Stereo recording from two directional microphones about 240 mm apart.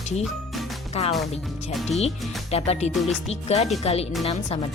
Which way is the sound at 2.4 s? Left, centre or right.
Left.